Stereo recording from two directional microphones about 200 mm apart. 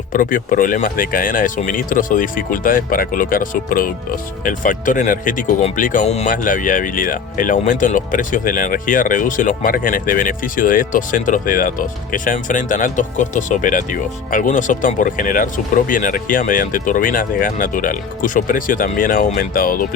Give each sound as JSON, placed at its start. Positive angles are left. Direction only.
{"t": 0.1, "sound": "speech", "side_deg": 45}